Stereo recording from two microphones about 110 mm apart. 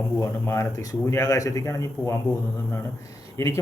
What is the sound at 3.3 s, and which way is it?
Speech, 25° left (ahead or behind).